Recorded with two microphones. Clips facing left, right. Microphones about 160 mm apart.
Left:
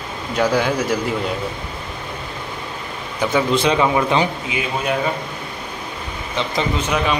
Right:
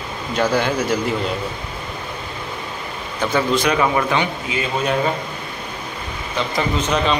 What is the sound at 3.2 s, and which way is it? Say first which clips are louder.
Speech: left 1 dB; 10° left (ahead or behind).